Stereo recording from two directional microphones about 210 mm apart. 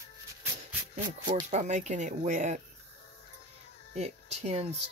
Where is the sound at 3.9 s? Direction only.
30° right (ahead or behind).